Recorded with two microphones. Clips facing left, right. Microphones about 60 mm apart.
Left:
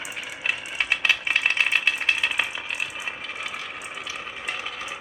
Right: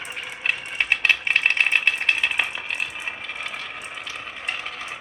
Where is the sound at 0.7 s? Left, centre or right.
Right.